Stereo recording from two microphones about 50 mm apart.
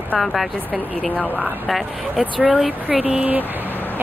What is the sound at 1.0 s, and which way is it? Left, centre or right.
Speech, left.